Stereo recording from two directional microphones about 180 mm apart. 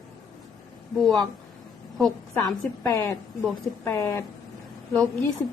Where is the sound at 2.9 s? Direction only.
15° left (ahead or behind).